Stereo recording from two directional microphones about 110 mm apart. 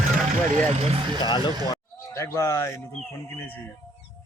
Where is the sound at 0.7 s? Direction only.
70° right (ahead or behind).